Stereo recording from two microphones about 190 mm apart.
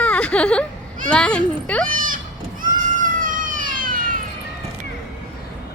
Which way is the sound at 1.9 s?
45° right (ahead or behind).